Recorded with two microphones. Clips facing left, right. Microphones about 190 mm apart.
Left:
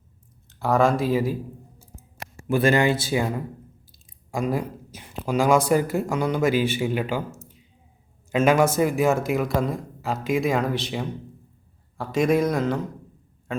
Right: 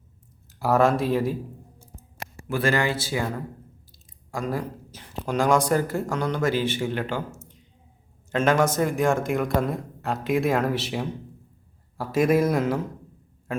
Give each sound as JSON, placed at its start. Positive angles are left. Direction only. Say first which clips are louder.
{"t": 0.6, "sound": "speech", "louder": "even", "side_deg": -5}
{"t": 2.5, "sound": "speech", "louder": "left 4 dB", "side_deg": 20}
{"t": 7.3, "sound": "a sound", "louder": "left 1 dB", "side_deg": 5}
{"t": 8.3, "sound": "speech", "louder": "left 2 dB", "side_deg": 10}